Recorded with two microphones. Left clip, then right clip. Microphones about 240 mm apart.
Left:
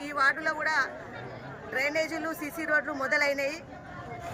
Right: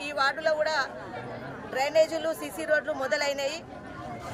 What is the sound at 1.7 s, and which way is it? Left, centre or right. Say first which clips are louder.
Speech: right 5 dB; centre.